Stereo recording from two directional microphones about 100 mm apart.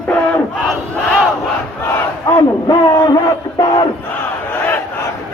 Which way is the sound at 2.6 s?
40° left (ahead or behind).